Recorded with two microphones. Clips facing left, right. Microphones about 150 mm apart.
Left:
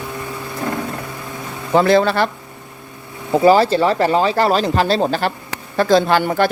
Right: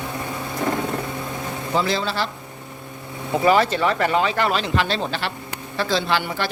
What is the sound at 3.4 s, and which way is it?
A man's voice, 35° left (ahead or behind).